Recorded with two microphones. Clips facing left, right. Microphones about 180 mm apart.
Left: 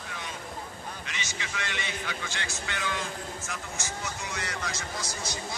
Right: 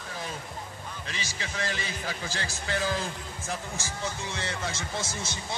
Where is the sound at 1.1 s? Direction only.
35° right (ahead or behind).